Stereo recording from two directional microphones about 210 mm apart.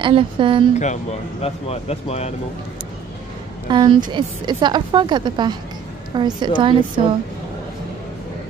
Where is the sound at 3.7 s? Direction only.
20° right (ahead or behind).